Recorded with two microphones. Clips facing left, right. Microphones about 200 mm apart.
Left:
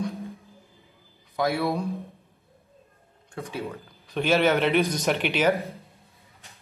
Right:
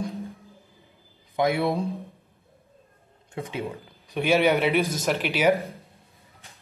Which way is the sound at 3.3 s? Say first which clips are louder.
Right 1 dB; 15° right (ahead or behind).